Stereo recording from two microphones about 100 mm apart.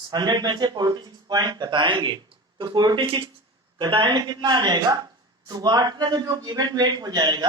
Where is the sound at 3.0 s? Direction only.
60° right (ahead or behind).